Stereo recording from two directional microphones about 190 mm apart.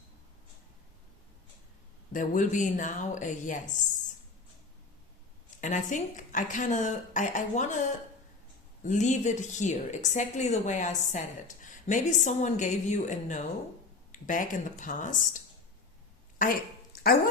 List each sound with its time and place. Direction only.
2.1 s a woman's voice: 40° left (ahead or behind)
5.5 s a woman's voice: 40° left (ahead or behind)
16.4 s a sound: 50° left (ahead or behind)